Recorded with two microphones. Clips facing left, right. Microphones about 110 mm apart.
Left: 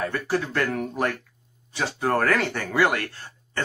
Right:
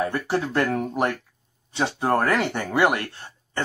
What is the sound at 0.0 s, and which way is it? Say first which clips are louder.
Speech: right 2 dB; 20° right (ahead or behind).